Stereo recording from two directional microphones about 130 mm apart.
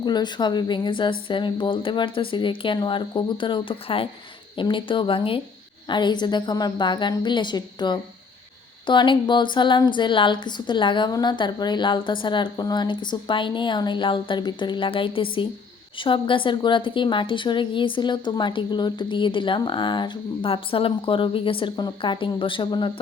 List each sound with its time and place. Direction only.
0.0 s a woman's voice: 35° left (ahead or behind)